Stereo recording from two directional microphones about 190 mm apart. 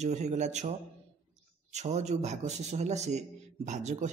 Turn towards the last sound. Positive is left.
turn(degrees=-40)  # may be behind; listen again after turning